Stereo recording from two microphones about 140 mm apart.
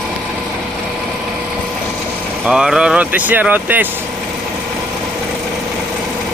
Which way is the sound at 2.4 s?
5° right (ahead or behind).